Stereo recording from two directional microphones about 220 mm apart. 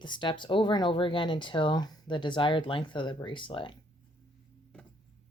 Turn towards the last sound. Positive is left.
turn(degrees=20)  # may be behind; listen again after turning